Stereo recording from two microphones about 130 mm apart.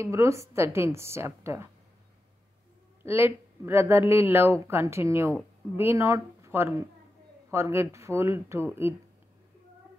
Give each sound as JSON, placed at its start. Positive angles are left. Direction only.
{"t": 0.0, "sound": "a woman's voice", "side_deg": -20}
{"t": 3.0, "sound": "a woman's voice", "side_deg": -20}